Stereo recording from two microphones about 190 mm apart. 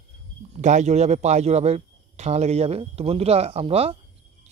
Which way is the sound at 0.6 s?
40° right (ahead or behind).